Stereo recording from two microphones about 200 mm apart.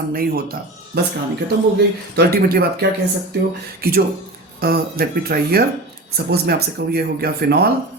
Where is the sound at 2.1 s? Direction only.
50° right (ahead or behind).